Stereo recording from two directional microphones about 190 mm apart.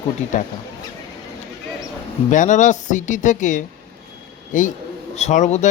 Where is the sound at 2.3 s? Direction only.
40° left (ahead or behind).